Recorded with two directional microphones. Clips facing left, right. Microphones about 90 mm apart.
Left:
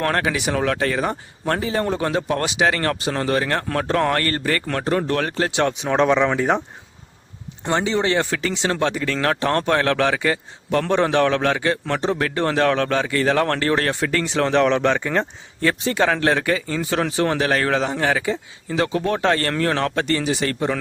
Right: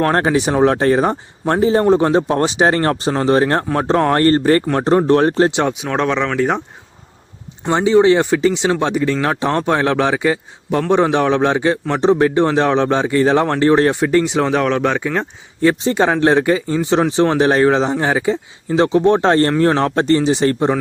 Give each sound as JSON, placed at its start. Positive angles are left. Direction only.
{"t": 0.0, "sound": "a man's voice", "side_deg": -30}
{"t": 5.8, "sound": "speech", "side_deg": 0}
{"t": 7.6, "sound": "a man's voice", "side_deg": -15}
{"t": 15.6, "sound": "a man's voice", "side_deg": -25}